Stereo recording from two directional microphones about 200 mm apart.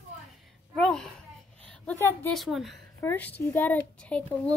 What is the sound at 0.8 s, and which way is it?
A woman's voice, centre (ahead or behind).